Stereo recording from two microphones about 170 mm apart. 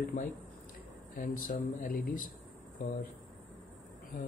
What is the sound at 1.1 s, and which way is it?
Speech, 55° left (ahead or behind).